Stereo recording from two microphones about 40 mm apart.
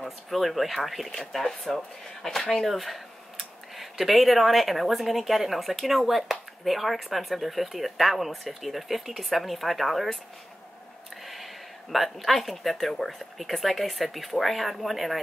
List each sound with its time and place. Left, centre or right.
0.3 s speech: centre
2.6 s speech: centre
11.2 s speech: centre